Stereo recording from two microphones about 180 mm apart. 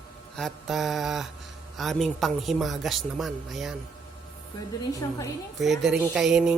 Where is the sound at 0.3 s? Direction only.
Centre (ahead or behind).